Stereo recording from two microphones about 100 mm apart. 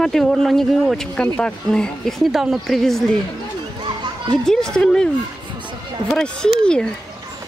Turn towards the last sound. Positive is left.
turn(degrees=10)  # may be behind; listen again after turning